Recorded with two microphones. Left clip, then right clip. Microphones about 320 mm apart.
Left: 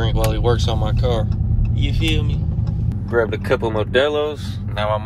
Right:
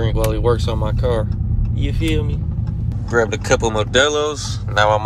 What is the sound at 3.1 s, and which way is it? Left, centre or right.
Speech, centre.